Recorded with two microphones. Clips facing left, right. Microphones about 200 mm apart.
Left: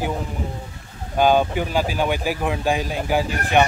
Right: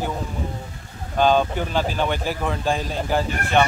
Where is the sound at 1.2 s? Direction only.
10° left (ahead or behind).